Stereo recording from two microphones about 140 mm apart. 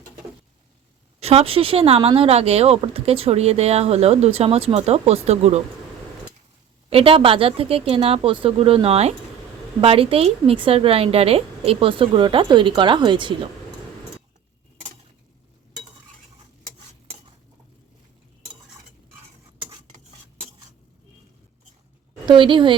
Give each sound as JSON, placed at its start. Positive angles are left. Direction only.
{"t": 1.2, "sound": "speech", "side_deg": -45}
{"t": 6.9, "sound": "a woman's voice", "side_deg": -40}
{"t": 22.3, "sound": "a woman's voice", "side_deg": -35}